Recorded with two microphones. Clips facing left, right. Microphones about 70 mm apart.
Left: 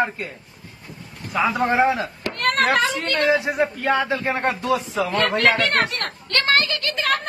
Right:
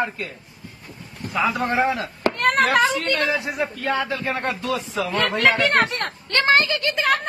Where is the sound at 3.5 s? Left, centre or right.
Left.